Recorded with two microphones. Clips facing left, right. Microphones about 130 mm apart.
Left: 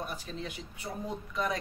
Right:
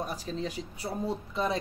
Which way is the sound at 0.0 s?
35° right (ahead or behind).